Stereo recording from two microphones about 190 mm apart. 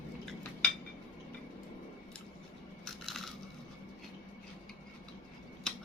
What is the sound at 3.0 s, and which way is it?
Crushing, centre (ahead or behind).